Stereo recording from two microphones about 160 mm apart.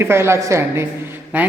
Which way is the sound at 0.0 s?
15° right (ahead or behind).